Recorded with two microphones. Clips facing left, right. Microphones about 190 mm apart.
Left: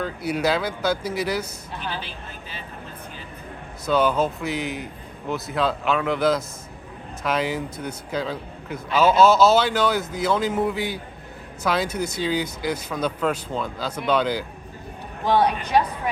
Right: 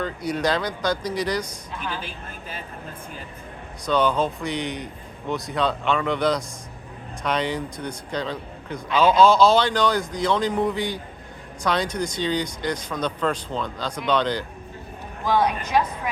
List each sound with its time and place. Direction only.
0.0 s speech: 5° left (ahead or behind)
2.0 s speech: 50° right (ahead or behind)
3.8 s a man's voice: 5° left (ahead or behind)
15.2 s speech: 30° left (ahead or behind)